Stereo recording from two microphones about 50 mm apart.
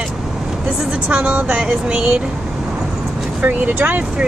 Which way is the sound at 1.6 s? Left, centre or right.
Centre.